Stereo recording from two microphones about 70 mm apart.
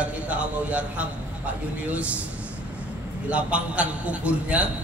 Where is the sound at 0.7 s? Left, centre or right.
Centre.